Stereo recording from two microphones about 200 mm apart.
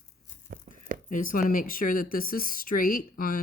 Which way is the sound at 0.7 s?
35° right (ahead or behind).